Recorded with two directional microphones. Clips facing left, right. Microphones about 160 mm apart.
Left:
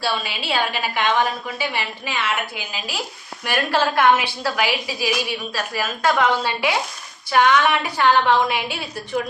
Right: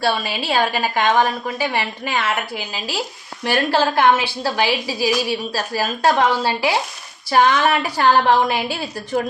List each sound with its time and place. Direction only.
0.0 s a woman's voice: 40° right (ahead or behind)
3.4 s a woman's voice: 30° right (ahead or behind)